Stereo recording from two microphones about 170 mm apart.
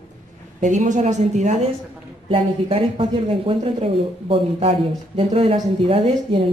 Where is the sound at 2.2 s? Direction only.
35° right (ahead or behind).